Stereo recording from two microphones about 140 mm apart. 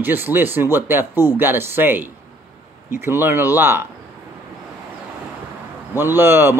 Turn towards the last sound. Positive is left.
turn(degrees=-15)  # may be behind; listen again after turning